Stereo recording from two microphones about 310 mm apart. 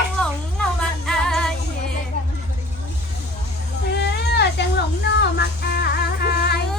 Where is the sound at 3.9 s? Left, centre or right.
Left.